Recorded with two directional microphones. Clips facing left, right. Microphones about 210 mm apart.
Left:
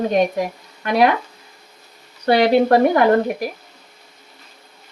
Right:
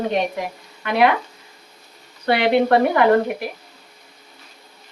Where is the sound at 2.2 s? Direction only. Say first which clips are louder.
Left 3 dB; 40° left (ahead or behind).